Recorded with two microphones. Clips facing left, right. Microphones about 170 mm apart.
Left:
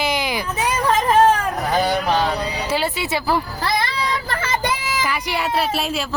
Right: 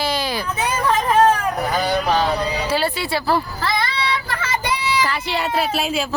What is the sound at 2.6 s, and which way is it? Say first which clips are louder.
Speech: right 1 dB; 20° left (ahead or behind).